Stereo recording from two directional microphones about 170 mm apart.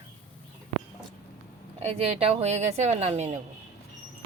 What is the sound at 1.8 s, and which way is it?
Speech, 35° right (ahead or behind).